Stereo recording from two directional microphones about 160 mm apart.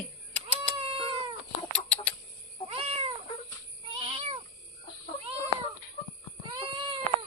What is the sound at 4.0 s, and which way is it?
Cat, 35° right (ahead or behind).